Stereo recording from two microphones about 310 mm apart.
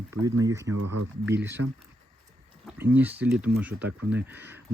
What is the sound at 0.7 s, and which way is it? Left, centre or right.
Speech, right.